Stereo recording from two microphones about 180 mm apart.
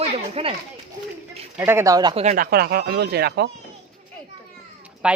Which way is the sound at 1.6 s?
15° right (ahead or behind).